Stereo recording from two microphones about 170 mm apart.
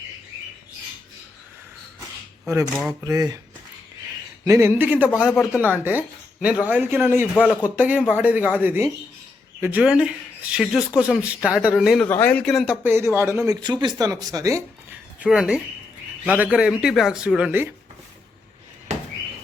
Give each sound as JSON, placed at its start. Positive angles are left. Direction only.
{"t": 2.5, "sound": "speech", "side_deg": -15}
{"t": 4.4, "sound": "speech", "side_deg": -15}
{"t": 5.3, "sound": "speech", "side_deg": 15}
{"t": 5.5, "sound": "speech", "side_deg": -10}
{"t": 12.0, "sound": "speech", "side_deg": 10}
{"t": 12.8, "sound": "speech", "side_deg": -15}
{"t": 15.2, "sound": "speech", "side_deg": -5}